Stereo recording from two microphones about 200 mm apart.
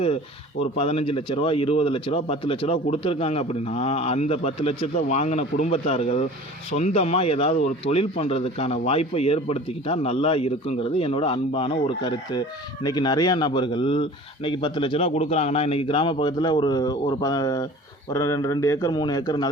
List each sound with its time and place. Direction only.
0.6 s speech: 30° left (ahead or behind)